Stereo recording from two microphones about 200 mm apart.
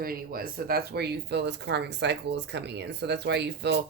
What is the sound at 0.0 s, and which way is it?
Speech, 45° right (ahead or behind).